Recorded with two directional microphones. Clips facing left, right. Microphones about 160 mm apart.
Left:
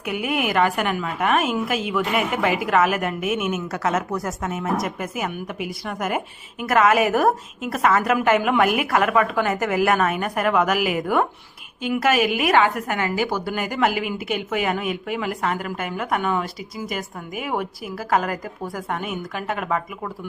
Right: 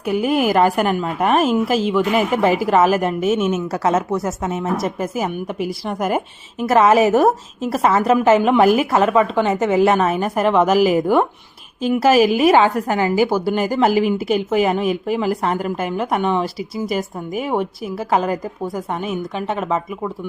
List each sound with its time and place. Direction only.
0.0 s a woman's voice: 30° right (ahead or behind)